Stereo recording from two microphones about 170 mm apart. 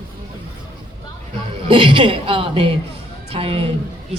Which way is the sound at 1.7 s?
30° right (ahead or behind).